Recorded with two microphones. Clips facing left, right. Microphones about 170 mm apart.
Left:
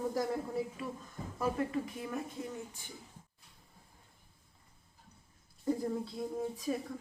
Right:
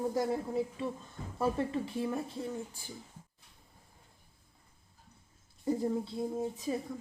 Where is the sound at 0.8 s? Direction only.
25° right (ahead or behind).